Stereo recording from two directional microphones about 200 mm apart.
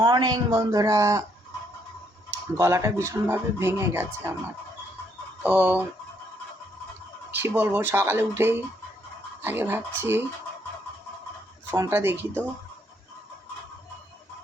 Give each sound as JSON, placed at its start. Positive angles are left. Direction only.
{"t": 0.0, "sound": "speech", "side_deg": -20}
{"t": 2.3, "sound": "speech", "side_deg": -15}
{"t": 5.4, "sound": "speech", "side_deg": -5}
{"t": 7.3, "sound": "speech", "side_deg": -10}
{"t": 11.7, "sound": "speech", "side_deg": -10}